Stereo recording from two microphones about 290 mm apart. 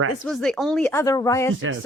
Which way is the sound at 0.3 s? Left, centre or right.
Centre.